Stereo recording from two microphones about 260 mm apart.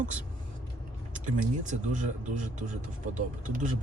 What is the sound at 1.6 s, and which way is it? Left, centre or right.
Speech, right.